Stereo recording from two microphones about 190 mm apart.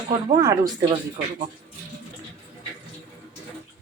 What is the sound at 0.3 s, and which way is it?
Speech, 20° right (ahead or behind).